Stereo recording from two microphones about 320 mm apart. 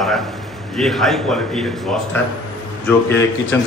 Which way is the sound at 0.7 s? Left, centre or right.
Centre.